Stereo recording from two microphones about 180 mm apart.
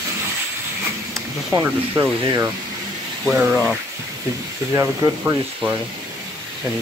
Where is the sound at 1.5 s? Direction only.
10° right (ahead or behind).